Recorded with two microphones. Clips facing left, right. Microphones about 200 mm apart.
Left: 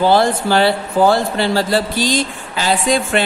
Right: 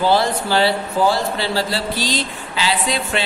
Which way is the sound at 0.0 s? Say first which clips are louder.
Left 4 dB; 50° left (ahead or behind).